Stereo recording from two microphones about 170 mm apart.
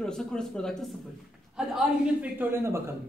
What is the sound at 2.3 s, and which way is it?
Speech, 15° right (ahead or behind).